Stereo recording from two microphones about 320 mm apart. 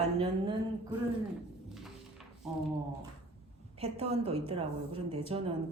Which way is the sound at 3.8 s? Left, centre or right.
Centre.